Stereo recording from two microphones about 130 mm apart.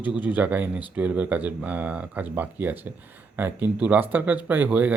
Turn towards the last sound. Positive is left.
turn(degrees=-10)  # may be behind; listen again after turning